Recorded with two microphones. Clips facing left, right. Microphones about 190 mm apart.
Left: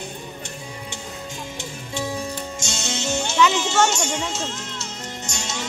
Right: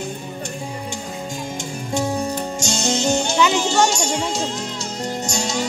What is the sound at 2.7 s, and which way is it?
Music, 35° right (ahead or behind).